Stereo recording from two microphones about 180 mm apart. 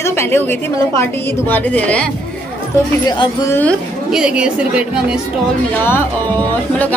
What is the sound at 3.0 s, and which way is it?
Speech, 25° left (ahead or behind).